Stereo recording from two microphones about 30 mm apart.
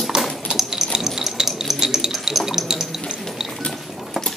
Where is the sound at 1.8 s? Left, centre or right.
Centre.